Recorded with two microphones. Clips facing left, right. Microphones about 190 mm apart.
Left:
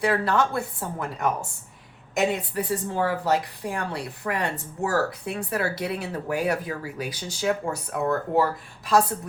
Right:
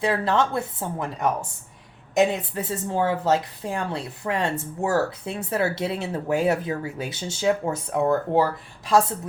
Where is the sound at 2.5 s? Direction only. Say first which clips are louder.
Even; 25° right (ahead or behind).